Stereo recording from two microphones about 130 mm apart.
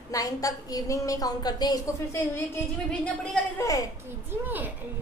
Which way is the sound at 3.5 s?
25° left (ahead or behind).